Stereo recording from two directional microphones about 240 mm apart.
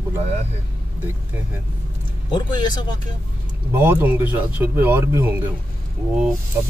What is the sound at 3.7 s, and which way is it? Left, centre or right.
Speech, centre.